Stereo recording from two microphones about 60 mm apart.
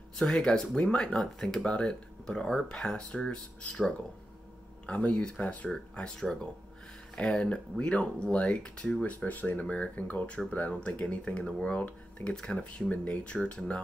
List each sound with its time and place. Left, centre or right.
0.2 s speech: centre
9.2 s speech: left